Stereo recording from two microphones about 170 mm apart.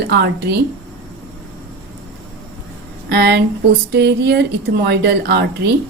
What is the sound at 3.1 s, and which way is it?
A woman's voice, 75° right (ahead or behind).